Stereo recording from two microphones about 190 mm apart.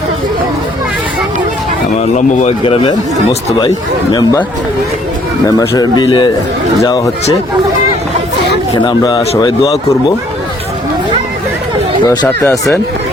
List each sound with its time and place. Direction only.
2.0 s speech: 40° left (ahead or behind)
4.1 s speech: 20° left (ahead or behind)
5.5 s speech: 20° left (ahead or behind)
8.7 s speech: 20° left (ahead or behind)
12.0 s speech: 20° left (ahead or behind)
12.3 s speech: 10° left (ahead or behind)